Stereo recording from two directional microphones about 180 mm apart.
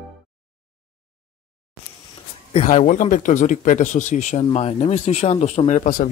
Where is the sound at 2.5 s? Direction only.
40° left (ahead or behind).